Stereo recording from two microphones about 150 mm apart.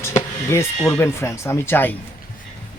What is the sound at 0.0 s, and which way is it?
Speech, 15° left (ahead or behind).